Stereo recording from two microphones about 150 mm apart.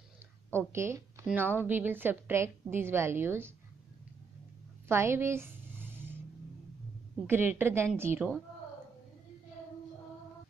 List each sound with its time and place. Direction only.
0.6 s a woman's voice: 15° right (ahead or behind)
4.8 s a sound: 15° right (ahead or behind)
7.2 s a woman's voice: 15° right (ahead or behind)